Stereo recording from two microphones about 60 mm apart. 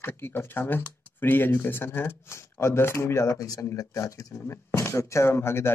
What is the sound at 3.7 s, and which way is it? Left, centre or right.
Speech, left.